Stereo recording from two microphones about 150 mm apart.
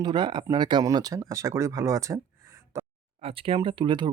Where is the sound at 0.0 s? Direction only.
30° right (ahead or behind).